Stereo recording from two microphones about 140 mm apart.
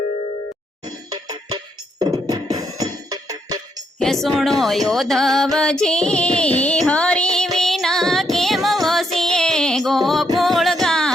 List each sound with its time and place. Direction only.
0.9 s music: 25° right (ahead or behind)
4.0 s speech: centre (ahead or behind)
5.5 s music: 5° left (ahead or behind)